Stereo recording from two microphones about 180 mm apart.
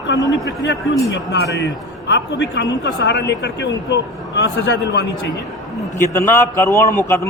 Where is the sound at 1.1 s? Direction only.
70° left (ahead or behind).